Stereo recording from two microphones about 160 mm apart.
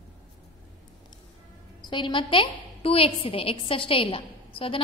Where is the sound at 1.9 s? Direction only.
30° left (ahead or behind).